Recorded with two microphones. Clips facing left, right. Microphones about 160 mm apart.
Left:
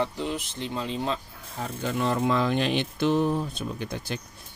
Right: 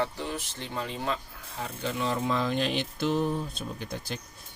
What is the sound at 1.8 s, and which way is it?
Speech, 55° left (ahead or behind).